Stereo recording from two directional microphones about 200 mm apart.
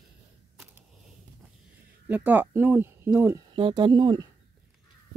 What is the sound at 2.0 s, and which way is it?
Speech, 10° right (ahead or behind).